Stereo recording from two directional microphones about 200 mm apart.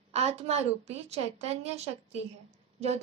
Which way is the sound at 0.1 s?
30° right (ahead or behind).